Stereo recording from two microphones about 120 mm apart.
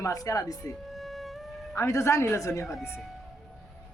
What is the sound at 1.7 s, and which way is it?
Speech, 25° left (ahead or behind).